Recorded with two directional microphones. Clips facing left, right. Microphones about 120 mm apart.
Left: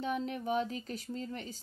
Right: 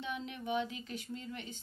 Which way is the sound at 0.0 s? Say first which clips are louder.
Left 6 dB; 40° left (ahead or behind).